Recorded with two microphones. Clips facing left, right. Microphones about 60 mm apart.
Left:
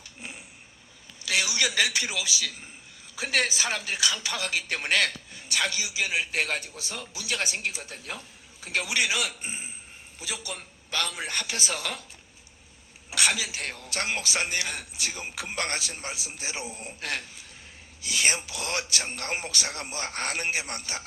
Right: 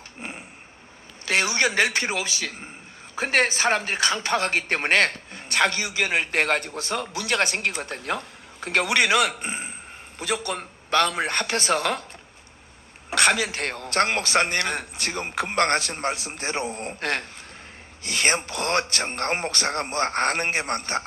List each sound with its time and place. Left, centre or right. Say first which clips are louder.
0.2 s a sound: right 6 dB; right
1.2 s speech: right 5 dB; right
13.1 s speech: right 7 dB; right